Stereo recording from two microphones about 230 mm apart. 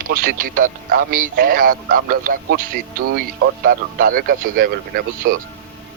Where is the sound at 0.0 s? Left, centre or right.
Right.